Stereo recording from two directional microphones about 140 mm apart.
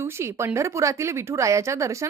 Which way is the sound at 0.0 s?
20° right (ahead or behind).